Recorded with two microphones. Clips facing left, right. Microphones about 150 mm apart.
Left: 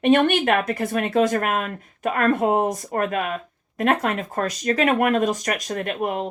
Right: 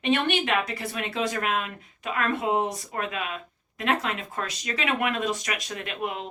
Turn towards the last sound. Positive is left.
turn(degrees=45)  # may be behind; listen again after turning